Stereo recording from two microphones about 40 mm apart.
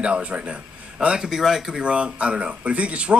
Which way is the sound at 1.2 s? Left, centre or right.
Centre.